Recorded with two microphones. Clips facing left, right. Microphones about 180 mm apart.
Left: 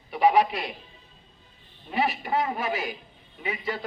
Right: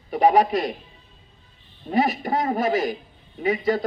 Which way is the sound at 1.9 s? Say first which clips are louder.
Right 5 dB; 40° right (ahead or behind).